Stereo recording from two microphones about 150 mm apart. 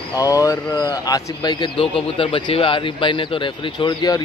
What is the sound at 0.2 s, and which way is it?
Speech, 25° left (ahead or behind).